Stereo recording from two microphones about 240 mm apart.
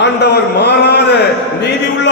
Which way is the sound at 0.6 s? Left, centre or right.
Left.